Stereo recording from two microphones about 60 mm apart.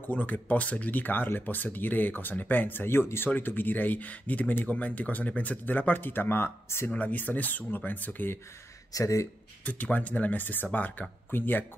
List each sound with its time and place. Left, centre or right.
0.0 s speech: left
6.9 s speech: left
8.9 s speech: left
9.7 s speech: left